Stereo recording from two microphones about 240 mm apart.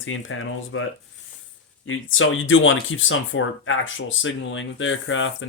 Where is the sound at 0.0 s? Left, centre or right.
Left.